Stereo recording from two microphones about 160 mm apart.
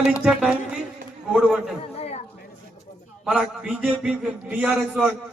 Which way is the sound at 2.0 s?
40° left (ahead or behind).